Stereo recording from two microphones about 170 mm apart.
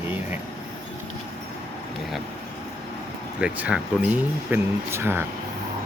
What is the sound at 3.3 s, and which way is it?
Speech, 5° right (ahead or behind).